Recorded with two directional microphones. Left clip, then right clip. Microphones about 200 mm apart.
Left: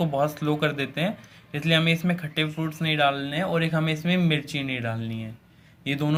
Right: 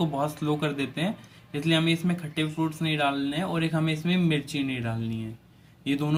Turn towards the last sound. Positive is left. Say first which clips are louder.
# left 1 dB
turn(degrees=35)  # may be behind; listen again after turning